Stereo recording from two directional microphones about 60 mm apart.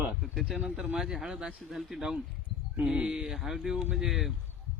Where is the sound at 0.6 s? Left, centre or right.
Centre.